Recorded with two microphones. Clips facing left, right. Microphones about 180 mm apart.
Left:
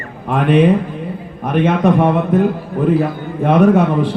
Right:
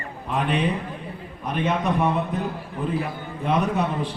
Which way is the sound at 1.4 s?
55° left (ahead or behind).